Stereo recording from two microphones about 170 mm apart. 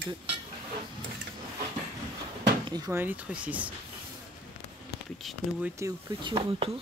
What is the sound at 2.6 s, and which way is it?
Speech, 25° right (ahead or behind).